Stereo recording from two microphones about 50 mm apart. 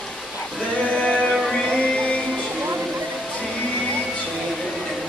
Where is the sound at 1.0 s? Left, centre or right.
Centre.